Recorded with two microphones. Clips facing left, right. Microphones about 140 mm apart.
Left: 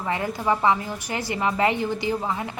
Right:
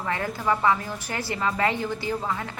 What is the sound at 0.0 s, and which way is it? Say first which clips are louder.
A woman's voice: left 2 dB; 20° left (ahead or behind).